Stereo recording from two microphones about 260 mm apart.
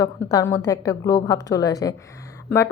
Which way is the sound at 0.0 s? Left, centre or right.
Centre.